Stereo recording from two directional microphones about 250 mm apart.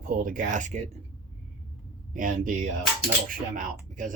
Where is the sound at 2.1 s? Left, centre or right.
Right.